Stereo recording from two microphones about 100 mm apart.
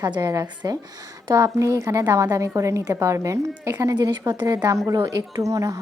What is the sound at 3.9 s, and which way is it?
Speech, 45° right (ahead or behind).